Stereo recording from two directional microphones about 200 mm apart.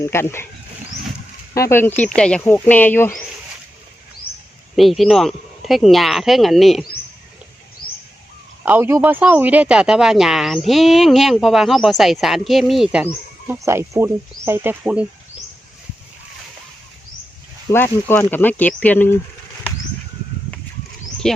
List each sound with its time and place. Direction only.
0.0 s speech: 10° left (ahead or behind)
1.5 s speech: 15° left (ahead or behind)
4.8 s speech: centre (ahead or behind)
7.8 s bird: 45° left (ahead or behind)
8.6 s speech: 10° right (ahead or behind)
17.7 s speech: 10° left (ahead or behind)
21.2 s speech: centre (ahead or behind)